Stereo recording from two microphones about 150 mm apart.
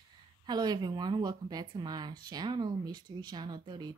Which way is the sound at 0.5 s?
30° right (ahead or behind).